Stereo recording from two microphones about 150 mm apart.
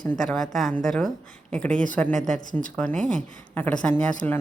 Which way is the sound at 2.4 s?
60° left (ahead or behind).